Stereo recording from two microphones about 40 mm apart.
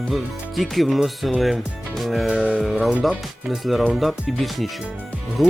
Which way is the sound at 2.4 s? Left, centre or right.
Right.